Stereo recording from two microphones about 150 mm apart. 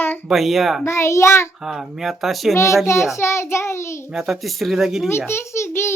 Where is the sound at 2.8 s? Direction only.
20° left (ahead or behind).